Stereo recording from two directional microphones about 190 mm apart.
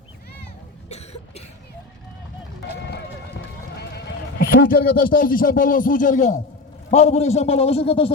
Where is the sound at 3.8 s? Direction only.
60° left (ahead or behind).